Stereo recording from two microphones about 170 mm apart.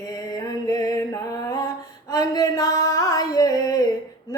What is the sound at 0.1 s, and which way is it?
Music, 20° left (ahead or behind).